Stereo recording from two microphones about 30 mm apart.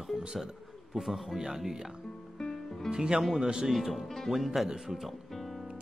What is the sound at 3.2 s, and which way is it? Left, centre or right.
Speech, centre.